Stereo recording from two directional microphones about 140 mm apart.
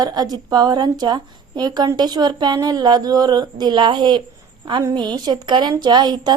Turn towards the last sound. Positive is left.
turn(degrees=-30)  # may be behind; listen again after turning